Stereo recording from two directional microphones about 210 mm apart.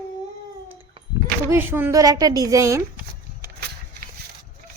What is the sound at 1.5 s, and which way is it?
A woman's voice, 10° right (ahead or behind).